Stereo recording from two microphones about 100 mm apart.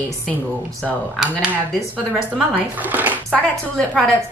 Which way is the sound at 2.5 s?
15° right (ahead or behind).